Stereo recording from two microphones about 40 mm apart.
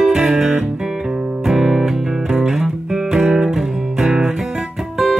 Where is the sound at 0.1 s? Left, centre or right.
Centre.